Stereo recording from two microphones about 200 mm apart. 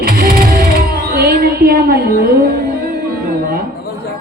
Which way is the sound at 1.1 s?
50° right (ahead or behind).